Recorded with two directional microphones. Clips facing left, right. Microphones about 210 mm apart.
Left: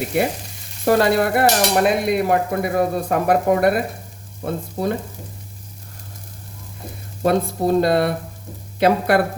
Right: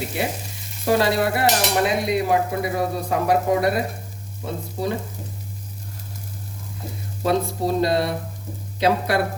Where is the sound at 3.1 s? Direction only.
55° left (ahead or behind).